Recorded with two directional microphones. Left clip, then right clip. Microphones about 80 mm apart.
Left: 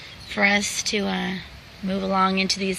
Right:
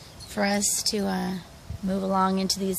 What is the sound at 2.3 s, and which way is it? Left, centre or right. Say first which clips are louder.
Speech: left 5 dB; right.